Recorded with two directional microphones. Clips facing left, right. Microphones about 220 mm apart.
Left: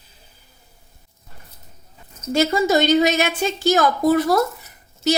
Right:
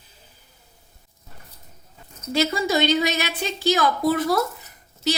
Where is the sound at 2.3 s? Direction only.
45° left (ahead or behind).